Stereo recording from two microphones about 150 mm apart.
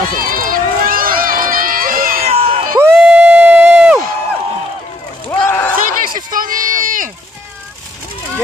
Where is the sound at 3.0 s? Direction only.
10° right (ahead or behind).